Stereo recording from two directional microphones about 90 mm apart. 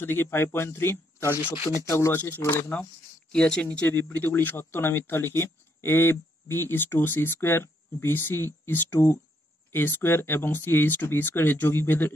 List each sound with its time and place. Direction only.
0.0 s speech: 25° left (ahead or behind)
3.3 s speech: 10° left (ahead or behind)